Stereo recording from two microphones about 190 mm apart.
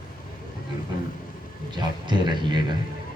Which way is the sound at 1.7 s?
25° right (ahead or behind).